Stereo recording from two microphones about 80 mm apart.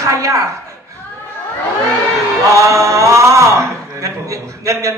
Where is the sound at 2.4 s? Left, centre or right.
Right.